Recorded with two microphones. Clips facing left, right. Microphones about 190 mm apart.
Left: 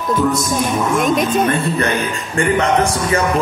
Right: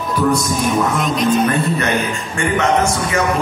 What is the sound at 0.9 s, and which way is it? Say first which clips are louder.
Speech: left 4 dB; 50° left (ahead or behind).